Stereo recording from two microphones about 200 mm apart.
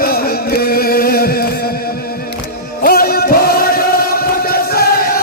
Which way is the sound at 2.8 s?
50° left (ahead or behind).